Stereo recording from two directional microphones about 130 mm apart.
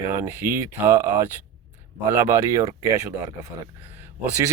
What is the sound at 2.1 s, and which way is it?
Speech, 20° right (ahead or behind).